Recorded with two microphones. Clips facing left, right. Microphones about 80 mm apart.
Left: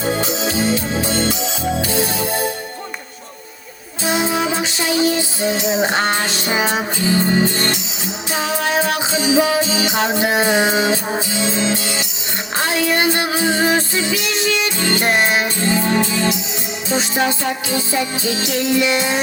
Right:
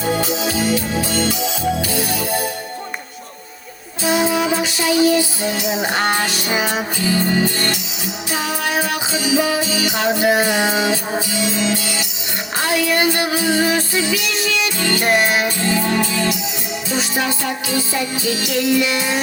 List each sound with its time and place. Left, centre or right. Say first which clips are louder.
0.0 s music: even; left
4.0 s music: right 1 dB; left